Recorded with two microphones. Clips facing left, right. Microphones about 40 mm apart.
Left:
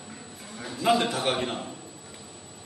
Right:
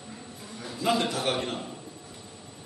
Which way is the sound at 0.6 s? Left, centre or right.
Centre.